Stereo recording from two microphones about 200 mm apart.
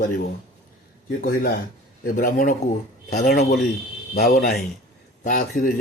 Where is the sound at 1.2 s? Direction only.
50° left (ahead or behind).